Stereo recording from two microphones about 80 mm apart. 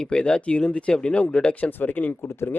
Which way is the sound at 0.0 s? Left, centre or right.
Centre.